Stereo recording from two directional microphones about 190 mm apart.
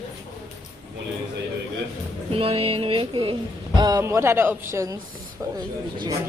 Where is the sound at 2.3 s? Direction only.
30° right (ahead or behind); by 5.0 s 15° right (ahead or behind).